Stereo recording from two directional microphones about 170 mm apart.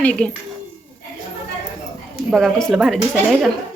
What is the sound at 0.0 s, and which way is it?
Speech, 5° left (ahead or behind).